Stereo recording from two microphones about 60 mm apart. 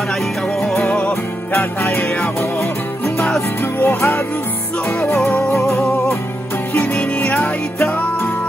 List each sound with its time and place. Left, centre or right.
0.6 s music: centre
1.6 s music: left
3.8 s music: left
6.7 s music: left